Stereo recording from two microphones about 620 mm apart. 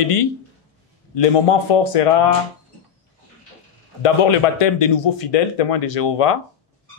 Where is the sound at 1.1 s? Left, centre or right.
Left.